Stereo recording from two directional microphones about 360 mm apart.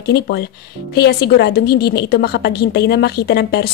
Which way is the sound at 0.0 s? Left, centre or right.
Left.